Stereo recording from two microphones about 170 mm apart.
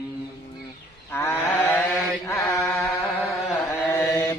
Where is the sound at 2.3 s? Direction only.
10° left (ahead or behind).